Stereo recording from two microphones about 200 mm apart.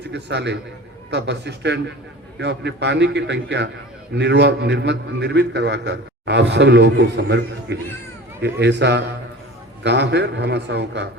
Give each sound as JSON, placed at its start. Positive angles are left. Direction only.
{"t": 0.0, "sound": "a man's voice", "side_deg": -60}